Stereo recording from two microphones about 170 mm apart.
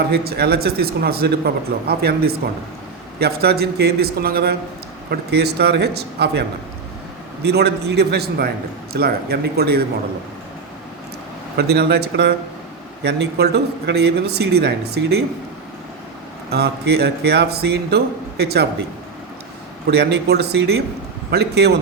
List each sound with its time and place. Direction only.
0.1 s a man's voice: 70° right (ahead or behind)
7.4 s a man's voice: 80° right
11.5 s a man's voice: 70° right (ahead or behind)
16.5 s a man's voice: 70° right (ahead or behind)
19.9 s a man's voice: 75° right (ahead or behind)